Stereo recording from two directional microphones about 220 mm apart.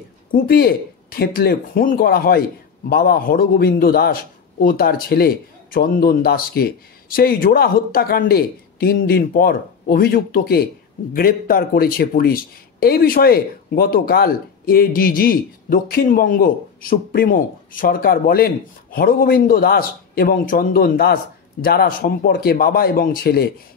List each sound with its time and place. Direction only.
0.3 s a man's voice: 45° left (ahead or behind)